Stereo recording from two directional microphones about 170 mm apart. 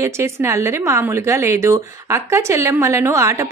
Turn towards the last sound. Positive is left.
turn(degrees=-15)  # may be behind; listen again after turning